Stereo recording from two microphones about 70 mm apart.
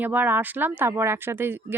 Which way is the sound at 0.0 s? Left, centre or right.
Right.